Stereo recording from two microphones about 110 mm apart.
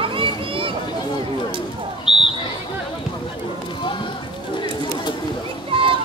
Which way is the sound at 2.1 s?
50° left (ahead or behind).